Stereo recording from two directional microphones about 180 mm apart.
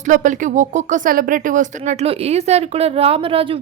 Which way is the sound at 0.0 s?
45° right (ahead or behind).